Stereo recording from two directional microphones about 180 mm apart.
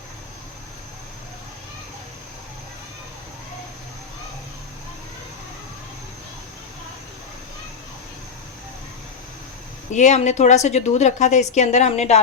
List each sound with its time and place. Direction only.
9.9 s a woman's voice: 40° left (ahead or behind)